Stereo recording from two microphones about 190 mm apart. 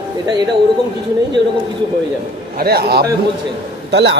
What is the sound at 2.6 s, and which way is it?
A man's voice, 55° right (ahead or behind).